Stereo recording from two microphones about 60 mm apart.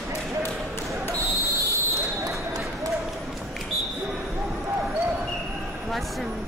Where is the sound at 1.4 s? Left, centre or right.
Right.